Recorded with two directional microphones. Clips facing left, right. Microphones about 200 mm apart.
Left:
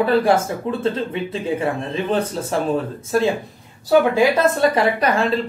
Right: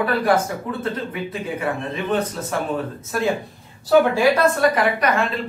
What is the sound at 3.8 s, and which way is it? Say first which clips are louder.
Speech: left 1 dB; 20° left (ahead or behind).